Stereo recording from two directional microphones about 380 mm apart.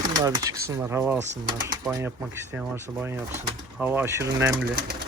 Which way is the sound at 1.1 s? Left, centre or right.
Right.